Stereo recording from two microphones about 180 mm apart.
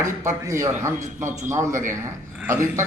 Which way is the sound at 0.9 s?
45° right (ahead or behind).